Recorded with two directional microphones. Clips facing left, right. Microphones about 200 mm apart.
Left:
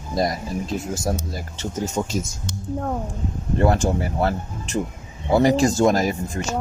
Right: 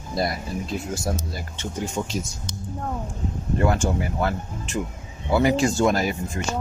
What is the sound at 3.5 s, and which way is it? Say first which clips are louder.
Speech: left 3 dB; 35° left (ahead or behind).